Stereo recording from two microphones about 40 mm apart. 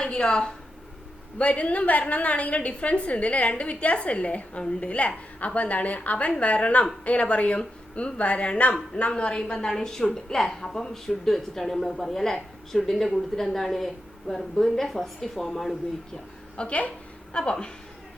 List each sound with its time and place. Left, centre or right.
0.0 s a woman's voice: centre
1.4 s a woman's voice: left; by 15.7 s centre
16.6 s a woman's voice: left
17.3 s a woman's voice: left